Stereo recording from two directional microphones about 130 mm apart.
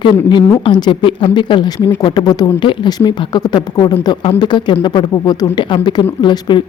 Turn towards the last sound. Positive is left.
turn(degrees=35)  # may be behind; listen again after turning